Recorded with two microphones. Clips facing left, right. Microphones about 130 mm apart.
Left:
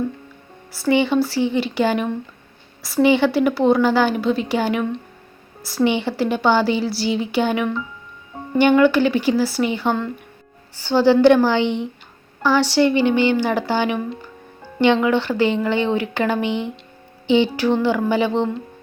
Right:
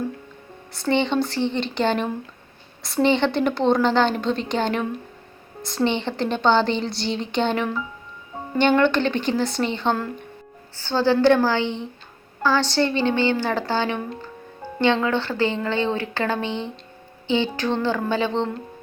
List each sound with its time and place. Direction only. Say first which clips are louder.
0.7 s a woman's voice: left 4 dB; 5° left (ahead or behind)
8.7 s a woman's voice: left 5 dB; 5° left (ahead or behind)